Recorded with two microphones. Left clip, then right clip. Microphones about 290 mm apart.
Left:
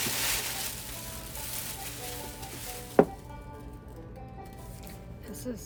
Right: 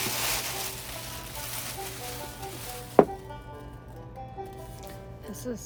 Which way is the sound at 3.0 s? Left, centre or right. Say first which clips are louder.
Right 3 dB; centre.